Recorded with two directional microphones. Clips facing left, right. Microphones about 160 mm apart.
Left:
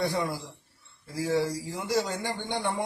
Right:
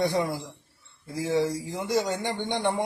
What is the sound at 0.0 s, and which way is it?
Speech, 20° right (ahead or behind).